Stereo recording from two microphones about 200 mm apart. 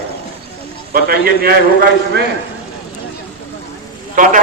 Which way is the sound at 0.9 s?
50° right (ahead or behind).